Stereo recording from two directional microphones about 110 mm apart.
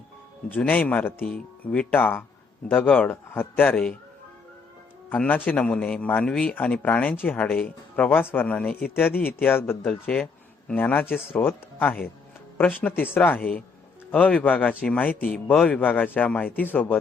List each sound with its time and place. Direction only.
0.4 s a man's voice: 15° left (ahead or behind)
5.0 s a man's voice: 15° left (ahead or behind)